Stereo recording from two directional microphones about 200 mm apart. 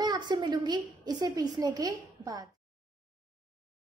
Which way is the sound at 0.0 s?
20° right (ahead or behind).